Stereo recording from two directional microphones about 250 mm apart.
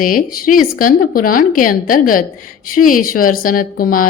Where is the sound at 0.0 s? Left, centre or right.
Left.